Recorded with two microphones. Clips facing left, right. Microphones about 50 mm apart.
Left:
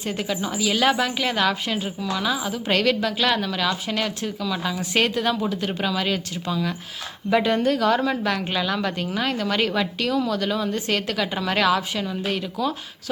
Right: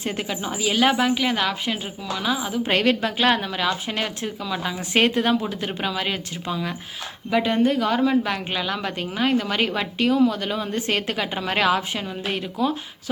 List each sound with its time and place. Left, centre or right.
0.0 s a woman's voice: centre
2.7 s a woman's voice: right
4.8 s a woman's voice: right
7.3 s a woman's voice: centre
7.5 s a woman's voice: centre
10.7 s a woman's voice: right